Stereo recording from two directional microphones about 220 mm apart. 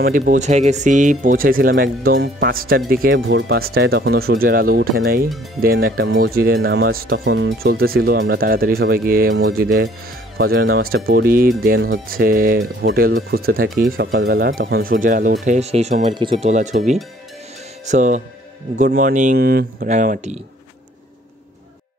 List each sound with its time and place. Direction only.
0.0 s speech: 40° right (ahead or behind)